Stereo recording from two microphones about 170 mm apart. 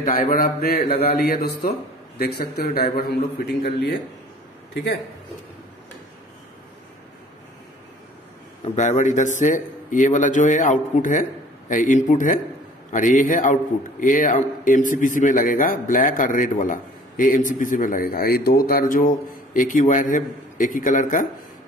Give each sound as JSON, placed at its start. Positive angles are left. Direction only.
{"t": 0.0, "sound": "a man's voice", "side_deg": 55}
{"t": 8.6, "sound": "a man's voice", "side_deg": 45}